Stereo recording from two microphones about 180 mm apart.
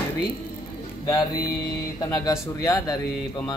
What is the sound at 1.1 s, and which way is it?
Speech, 20° left (ahead or behind).